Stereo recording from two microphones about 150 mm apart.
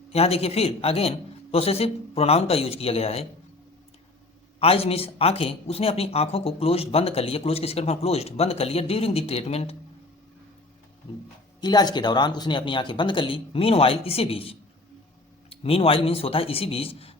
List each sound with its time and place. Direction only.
0.1 s speech: 40° left (ahead or behind)
4.6 s speech: 40° left (ahead or behind)
11.6 s speech: 25° left (ahead or behind)